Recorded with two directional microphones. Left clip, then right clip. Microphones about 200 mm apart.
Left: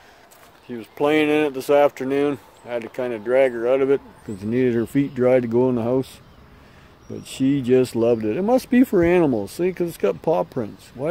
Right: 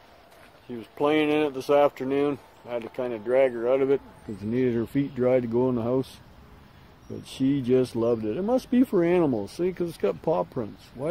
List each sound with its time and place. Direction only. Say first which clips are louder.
0.7 s speech: left 4 dB; 20° left (ahead or behind)
7.2 s speech: left 5 dB; 15° left (ahead or behind)